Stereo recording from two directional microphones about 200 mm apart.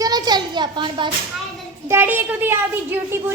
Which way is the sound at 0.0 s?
20° right (ahead or behind).